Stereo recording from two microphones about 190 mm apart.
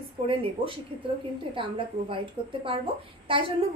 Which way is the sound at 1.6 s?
30° right (ahead or behind).